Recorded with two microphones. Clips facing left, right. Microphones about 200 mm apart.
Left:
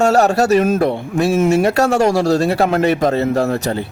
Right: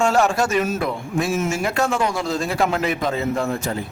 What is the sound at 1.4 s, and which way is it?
Speech, 60° left (ahead or behind).